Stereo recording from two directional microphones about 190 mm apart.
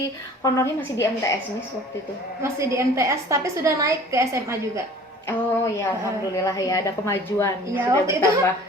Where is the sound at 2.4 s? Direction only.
15° right (ahead or behind).